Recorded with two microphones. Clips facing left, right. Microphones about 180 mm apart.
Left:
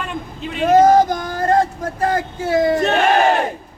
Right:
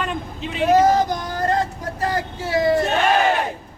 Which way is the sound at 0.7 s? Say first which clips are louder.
Left 4 dB; 50° left (ahead or behind).